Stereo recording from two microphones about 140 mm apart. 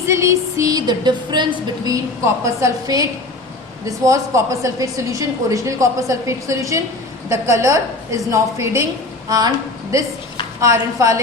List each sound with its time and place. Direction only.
0.1 s a woman's voice: 20° right (ahead or behind)
2.4 s a woman's voice: 20° right (ahead or behind)
9.9 s a woman's voice: 25° right (ahead or behind)